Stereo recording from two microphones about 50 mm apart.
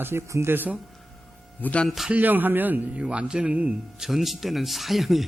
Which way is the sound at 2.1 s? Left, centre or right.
Right.